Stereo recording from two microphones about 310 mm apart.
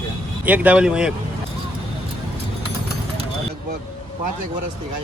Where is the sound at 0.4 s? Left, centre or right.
Centre.